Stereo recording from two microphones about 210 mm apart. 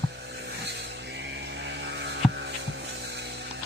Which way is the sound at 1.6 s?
55° right (ahead or behind).